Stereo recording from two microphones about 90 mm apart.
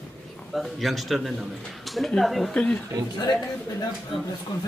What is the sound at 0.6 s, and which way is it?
Speech, centre (ahead or behind).